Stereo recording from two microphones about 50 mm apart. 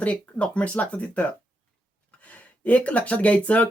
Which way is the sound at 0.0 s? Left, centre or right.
Left.